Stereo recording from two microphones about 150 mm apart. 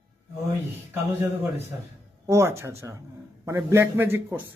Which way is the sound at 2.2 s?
20° right (ahead or behind).